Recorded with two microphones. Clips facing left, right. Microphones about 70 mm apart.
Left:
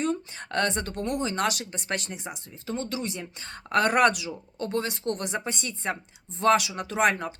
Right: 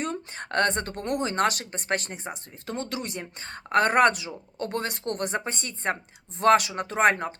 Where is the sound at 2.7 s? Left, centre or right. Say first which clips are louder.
Left 1 dB; right.